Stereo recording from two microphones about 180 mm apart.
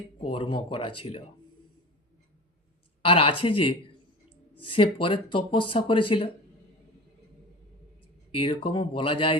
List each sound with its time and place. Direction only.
0.2 s speech: 30° left (ahead or behind)
3.0 s speech: 30° left (ahead or behind)
8.4 s speech: 30° left (ahead or behind)